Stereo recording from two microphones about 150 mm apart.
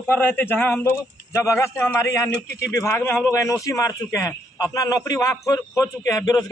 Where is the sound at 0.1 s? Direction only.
15° left (ahead or behind).